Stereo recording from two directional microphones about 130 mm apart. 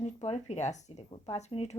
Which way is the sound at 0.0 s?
55° left (ahead or behind).